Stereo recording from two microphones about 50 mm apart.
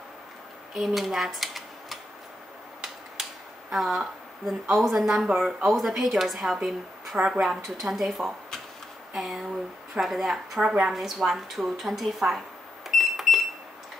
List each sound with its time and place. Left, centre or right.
0.7 s speech: centre
3.7 s a woman's voice: centre
5.0 s speech: centre
5.7 s a woman's voice: centre
7.2 s speech: centre
7.6 s a woman's voice: centre
12.8 s alarm: centre